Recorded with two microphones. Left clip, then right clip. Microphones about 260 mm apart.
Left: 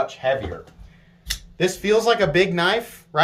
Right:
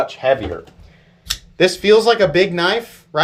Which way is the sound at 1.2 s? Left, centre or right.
Centre.